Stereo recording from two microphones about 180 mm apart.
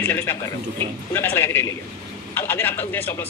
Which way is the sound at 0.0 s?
10° left (ahead or behind).